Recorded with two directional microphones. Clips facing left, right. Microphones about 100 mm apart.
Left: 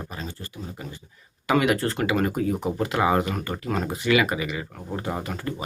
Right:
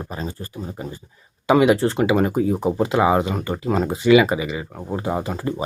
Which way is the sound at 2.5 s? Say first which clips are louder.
Right 6 dB; 30° right (ahead or behind).